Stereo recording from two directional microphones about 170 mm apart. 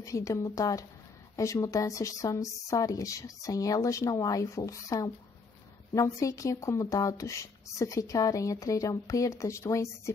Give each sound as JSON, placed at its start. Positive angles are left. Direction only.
{"t": 0.0, "sound": "speech", "side_deg": 20}